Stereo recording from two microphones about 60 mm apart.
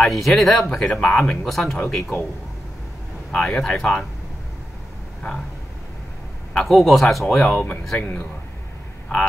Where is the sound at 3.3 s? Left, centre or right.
Centre.